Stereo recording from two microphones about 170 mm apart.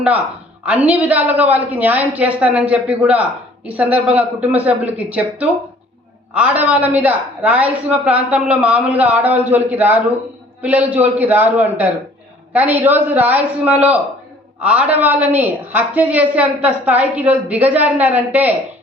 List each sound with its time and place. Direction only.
0.6 s a woman's voice: 10° right (ahead or behind)